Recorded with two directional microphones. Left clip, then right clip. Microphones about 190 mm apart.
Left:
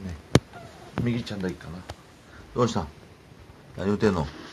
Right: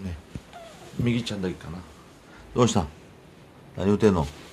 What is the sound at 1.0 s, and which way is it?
Speech, 10° right (ahead or behind).